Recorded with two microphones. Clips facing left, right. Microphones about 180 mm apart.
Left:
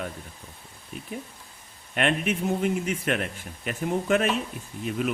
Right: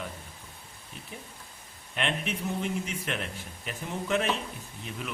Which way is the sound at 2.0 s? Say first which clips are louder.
Left 7 dB; 50° left (ahead or behind).